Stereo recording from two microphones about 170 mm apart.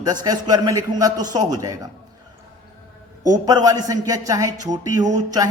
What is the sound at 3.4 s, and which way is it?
A man's voice, 25° right (ahead or behind).